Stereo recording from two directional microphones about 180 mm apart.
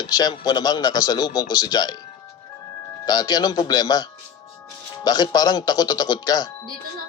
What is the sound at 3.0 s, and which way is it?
Speech, 20° left (ahead or behind).